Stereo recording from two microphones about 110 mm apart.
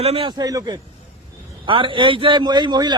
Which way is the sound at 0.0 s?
60° right (ahead or behind).